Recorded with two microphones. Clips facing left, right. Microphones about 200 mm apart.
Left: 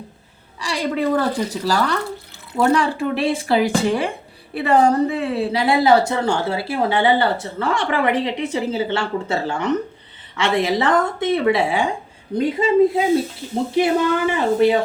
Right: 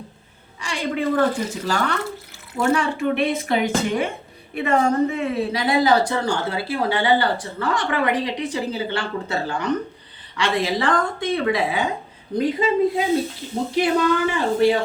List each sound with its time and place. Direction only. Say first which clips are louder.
0.6 s a woman's voice: left 3 dB; 35° left (ahead or behind); by 14.8 s 20° left (ahead or behind)